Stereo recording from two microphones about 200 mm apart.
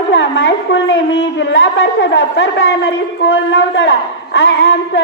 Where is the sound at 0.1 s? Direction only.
65° left (ahead or behind).